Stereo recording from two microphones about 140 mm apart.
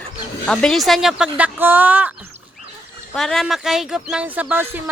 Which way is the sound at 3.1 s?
5° left (ahead or behind).